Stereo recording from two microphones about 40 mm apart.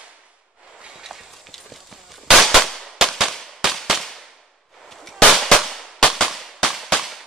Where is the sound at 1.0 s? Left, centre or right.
Centre.